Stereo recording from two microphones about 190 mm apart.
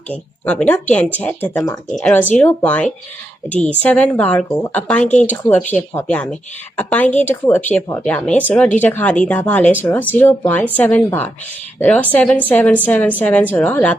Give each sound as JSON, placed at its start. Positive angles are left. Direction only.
{"t": 0.1, "sound": "speech", "side_deg": 10}
{"t": 1.9, "sound": "speech", "side_deg": 5}